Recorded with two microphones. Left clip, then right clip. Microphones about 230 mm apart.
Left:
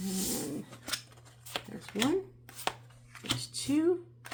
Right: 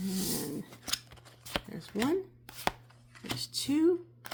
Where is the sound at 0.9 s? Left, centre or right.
Right.